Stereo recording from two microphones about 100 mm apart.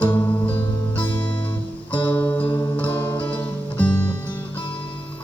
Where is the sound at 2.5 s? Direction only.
35° left (ahead or behind).